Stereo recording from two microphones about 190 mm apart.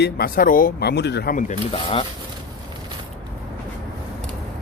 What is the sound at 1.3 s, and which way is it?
Speech, 35° left (ahead or behind).